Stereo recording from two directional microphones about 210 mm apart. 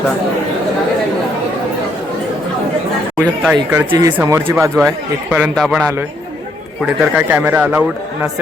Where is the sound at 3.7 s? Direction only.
15° right (ahead or behind).